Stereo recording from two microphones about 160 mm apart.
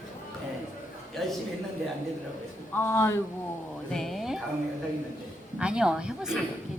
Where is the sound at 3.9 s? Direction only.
Centre (ahead or behind).